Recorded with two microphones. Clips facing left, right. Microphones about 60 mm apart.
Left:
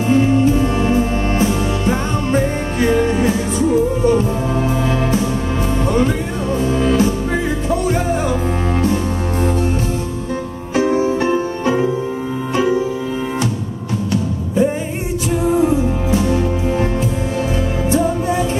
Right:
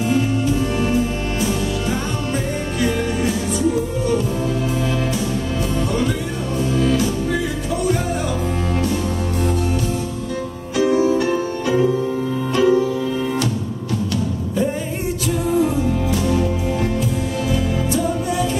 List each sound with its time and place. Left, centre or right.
0.0 s music: left
6.7 s music: left
10.8 s music: left
12.5 s music: centre
15.4 s music: left
17.9 s music: left